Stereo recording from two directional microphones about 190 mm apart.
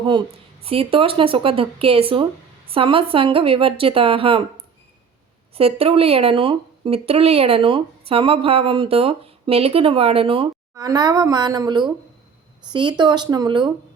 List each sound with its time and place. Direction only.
0.0 s speech: 25° right (ahead or behind)
5.5 s speech: 30° right (ahead or behind)